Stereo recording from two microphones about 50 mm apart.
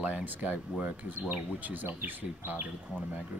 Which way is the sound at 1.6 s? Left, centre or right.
Right.